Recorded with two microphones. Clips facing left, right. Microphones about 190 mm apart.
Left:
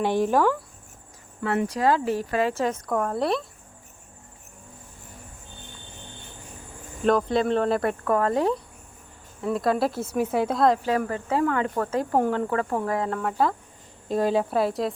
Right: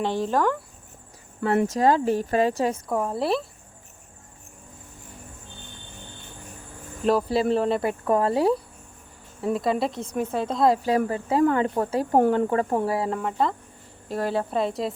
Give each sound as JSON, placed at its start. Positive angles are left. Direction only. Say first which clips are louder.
{"t": 0.0, "sound": "speech", "louder": "left 2 dB", "side_deg": 10}
{"t": 1.5, "sound": "speech", "louder": "right 2 dB", "side_deg": -40}
{"t": 2.9, "sound": "speech", "louder": "even", "side_deg": -5}
{"t": 7.0, "sound": "speech", "louder": "even", "side_deg": -5}
{"t": 8.0, "sound": "speech", "louder": "right 3 dB", "side_deg": -15}
{"t": 10.6, "sound": "speech", "louder": "right 3 dB", "side_deg": -10}
{"t": 11.4, "sound": "speech", "louder": "right 3 dB", "side_deg": -25}
{"t": 13.2, "sound": "speech", "louder": "left 1 dB", "side_deg": 0}
{"t": 14.1, "sound": "speech", "louder": "left 3 dB", "side_deg": 15}
{"t": 14.5, "sound": "speech", "louder": "left 1 dB", "side_deg": 0}